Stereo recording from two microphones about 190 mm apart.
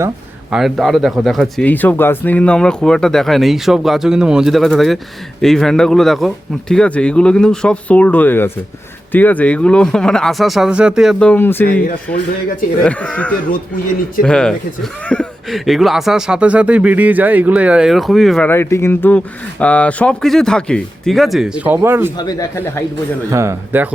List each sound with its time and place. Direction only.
0.5 s speech: centre (ahead or behind)
12.8 s speech: 5° left (ahead or behind); by 22.1 s 10° right (ahead or behind)
22.2 s speech: 20° left (ahead or behind)
23.3 s speech: 15° right (ahead or behind)